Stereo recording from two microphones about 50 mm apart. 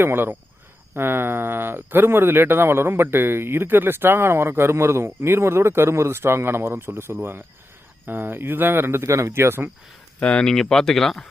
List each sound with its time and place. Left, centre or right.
0.0 s speech: right
10.2 s speech: left
10.4 s speech: centre